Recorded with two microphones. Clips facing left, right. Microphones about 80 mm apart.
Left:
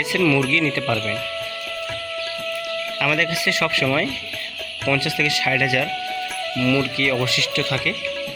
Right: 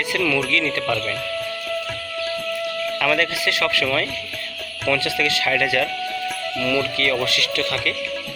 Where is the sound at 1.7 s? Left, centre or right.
Centre.